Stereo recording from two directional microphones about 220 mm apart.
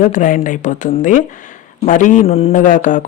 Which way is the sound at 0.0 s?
35° left (ahead or behind).